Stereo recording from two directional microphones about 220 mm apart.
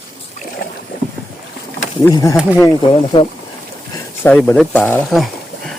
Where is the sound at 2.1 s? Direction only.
15° left (ahead or behind).